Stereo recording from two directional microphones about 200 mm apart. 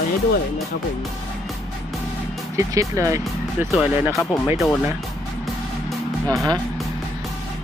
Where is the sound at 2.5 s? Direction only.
15° right (ahead or behind).